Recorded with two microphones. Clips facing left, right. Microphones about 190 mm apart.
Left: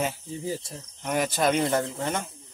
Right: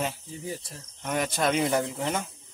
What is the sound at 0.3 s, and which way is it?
Speech, 30° left (ahead or behind).